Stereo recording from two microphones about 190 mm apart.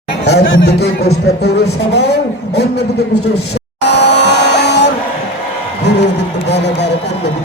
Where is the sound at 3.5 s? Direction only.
65° left (ahead or behind).